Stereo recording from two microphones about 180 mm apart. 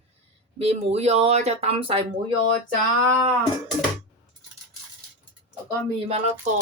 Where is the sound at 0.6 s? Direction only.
35° right (ahead or behind).